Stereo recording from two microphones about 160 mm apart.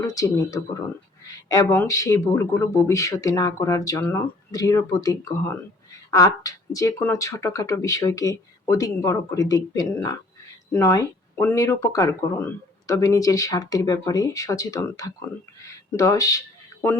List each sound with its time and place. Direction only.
0.0 s speech: 20° left (ahead or behind)